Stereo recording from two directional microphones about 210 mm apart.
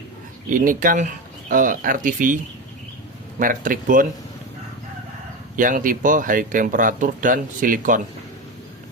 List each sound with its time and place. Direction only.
0.5 s speech: 40° right (ahead or behind)
5.5 s speech: 40° right (ahead or behind)